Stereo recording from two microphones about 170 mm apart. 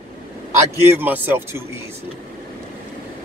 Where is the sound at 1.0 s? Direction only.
10° right (ahead or behind).